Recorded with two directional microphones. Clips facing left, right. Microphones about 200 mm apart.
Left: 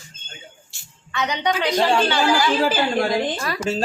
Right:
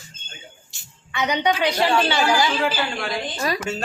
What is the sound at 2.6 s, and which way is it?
Speech, 35° left (ahead or behind).